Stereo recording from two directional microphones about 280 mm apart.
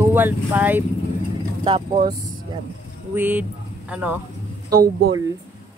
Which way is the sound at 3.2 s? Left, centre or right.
Centre.